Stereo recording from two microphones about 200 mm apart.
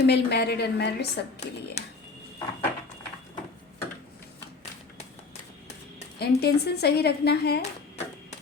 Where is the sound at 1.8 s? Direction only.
35° left (ahead or behind).